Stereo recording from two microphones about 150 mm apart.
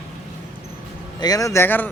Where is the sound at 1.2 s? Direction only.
25° left (ahead or behind).